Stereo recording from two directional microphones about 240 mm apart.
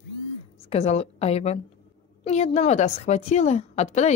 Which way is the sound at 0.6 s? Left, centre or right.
Left.